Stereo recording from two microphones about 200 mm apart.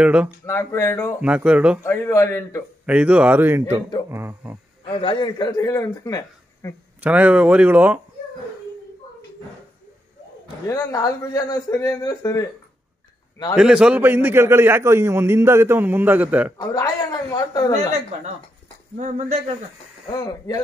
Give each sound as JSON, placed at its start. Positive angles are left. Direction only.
{"t": 0.0, "sound": "speech", "side_deg": -5}
{"t": 0.5, "sound": "speech", "side_deg": 15}
{"t": 1.2, "sound": "a man's voice", "side_deg": -5}
{"t": 1.8, "sound": "speech", "side_deg": 15}
{"t": 2.9, "sound": "a man's voice", "side_deg": -5}
{"t": 4.8, "sound": "a man's voice", "side_deg": 25}
{"t": 7.0, "sound": "a man's voice", "side_deg": -5}
{"t": 10.7, "sound": "speech", "side_deg": 15}
{"t": 13.6, "sound": "a man's voice", "side_deg": -5}
{"t": 16.5, "sound": "speech", "side_deg": 15}
{"t": 18.9, "sound": "speech", "side_deg": -35}
{"t": 20.1, "sound": "a man's voice", "side_deg": 20}